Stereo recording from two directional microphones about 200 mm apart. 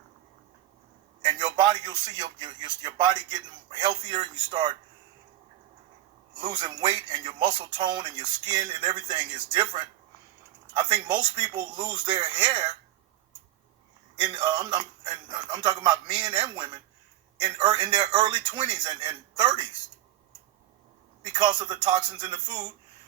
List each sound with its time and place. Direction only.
1.2 s a man's voice: 20° right (ahead or behind)
6.3 s a man's voice: 20° right (ahead or behind)
14.2 s a man's voice: 25° right (ahead or behind)
21.3 s a man's voice: 20° right (ahead or behind)